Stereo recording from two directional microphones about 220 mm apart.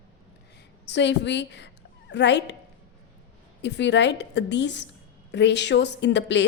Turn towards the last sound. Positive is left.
turn(degrees=55)  # may be behind; listen again after turning